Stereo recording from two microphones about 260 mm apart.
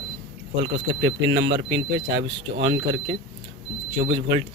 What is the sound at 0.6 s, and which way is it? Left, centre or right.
Speech, right.